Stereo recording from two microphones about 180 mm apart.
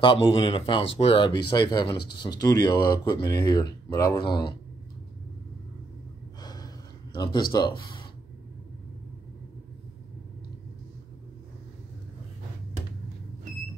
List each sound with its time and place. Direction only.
0.0 s speech: 30° left (ahead or behind)
6.4 s gasp: 20° left (ahead or behind)